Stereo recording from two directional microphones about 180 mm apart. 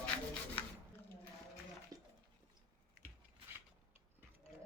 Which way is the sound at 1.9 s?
20° right (ahead or behind).